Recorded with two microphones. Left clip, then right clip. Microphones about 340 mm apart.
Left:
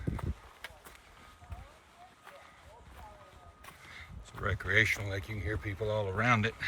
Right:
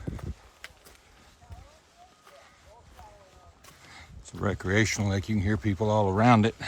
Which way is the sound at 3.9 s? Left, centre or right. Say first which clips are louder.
Right 4 dB; centre.